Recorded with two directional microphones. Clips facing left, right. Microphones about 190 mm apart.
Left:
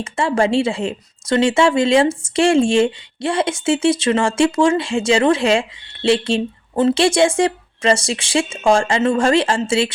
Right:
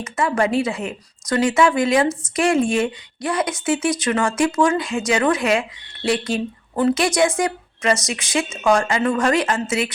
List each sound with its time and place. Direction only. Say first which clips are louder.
0.0 s speech: left 2 dB; 30° left (ahead or behind)